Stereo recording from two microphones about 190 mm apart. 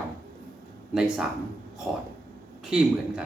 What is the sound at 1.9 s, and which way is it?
Speech, 5° right (ahead or behind).